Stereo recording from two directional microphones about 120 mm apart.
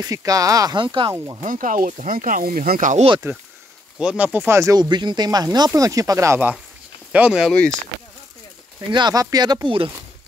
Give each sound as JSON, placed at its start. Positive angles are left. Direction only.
{"t": 0.0, "sound": "speech", "side_deg": -30}
{"t": 0.7, "sound": "speech", "side_deg": -45}
{"t": 1.1, "sound": "speech", "side_deg": -25}
{"t": 1.4, "sound": "speech", "side_deg": -90}
{"t": 4.0, "sound": "speech", "side_deg": -10}
{"t": 7.1, "sound": "speech", "side_deg": -10}
{"t": 8.9, "sound": "speech", "side_deg": -35}